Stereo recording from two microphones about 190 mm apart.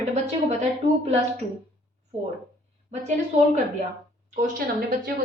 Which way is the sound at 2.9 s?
40° right (ahead or behind).